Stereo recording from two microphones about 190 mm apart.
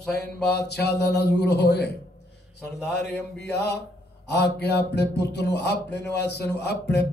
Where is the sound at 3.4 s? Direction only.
65° left (ahead or behind).